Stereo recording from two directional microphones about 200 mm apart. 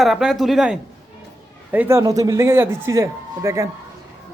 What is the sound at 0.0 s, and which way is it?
Speech, centre (ahead or behind).